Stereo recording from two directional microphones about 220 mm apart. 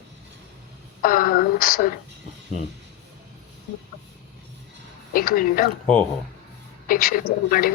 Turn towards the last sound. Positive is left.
turn(degrees=40)  # may be behind; listen again after turning